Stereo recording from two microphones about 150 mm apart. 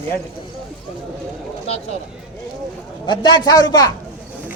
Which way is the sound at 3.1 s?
30° left (ahead or behind).